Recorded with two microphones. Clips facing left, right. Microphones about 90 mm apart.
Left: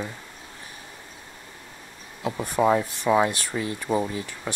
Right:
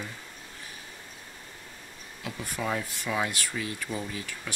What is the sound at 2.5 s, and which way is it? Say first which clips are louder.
Speech: left 11 dB; 35° left (ahead or behind).